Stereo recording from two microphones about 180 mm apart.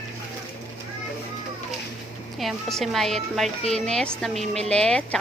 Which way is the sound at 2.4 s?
Centre (ahead or behind).